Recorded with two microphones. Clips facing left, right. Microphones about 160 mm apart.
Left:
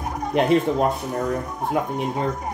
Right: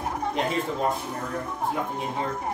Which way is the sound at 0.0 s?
10° left (ahead or behind).